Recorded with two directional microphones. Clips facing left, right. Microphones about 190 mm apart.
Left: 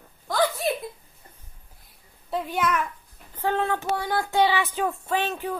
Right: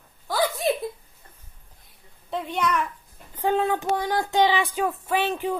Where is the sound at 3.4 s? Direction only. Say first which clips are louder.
Right 2 dB; 15° right (ahead or behind).